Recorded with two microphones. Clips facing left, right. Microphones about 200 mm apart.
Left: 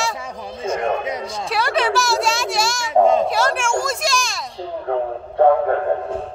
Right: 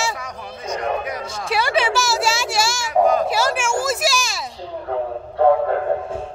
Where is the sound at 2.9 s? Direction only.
25° left (ahead or behind).